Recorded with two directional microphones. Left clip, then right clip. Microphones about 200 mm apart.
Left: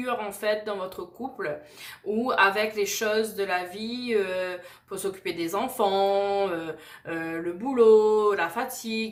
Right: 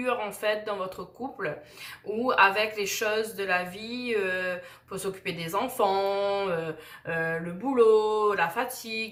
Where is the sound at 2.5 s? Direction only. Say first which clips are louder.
Left 1 dB; 35° left (ahead or behind).